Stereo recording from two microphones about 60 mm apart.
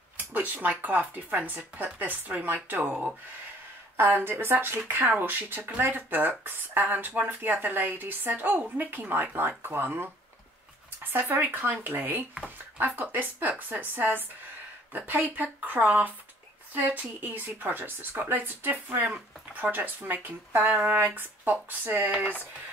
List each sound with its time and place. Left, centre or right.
0.2 s speech: right
3.9 s speech: right
11.1 s speech: right